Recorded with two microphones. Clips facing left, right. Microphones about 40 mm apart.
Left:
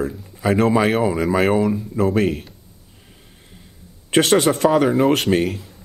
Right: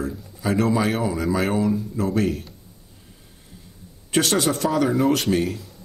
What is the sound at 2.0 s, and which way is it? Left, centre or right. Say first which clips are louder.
Speech: left 4 dB; left.